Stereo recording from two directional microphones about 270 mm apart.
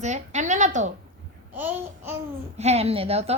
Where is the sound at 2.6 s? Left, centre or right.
Right.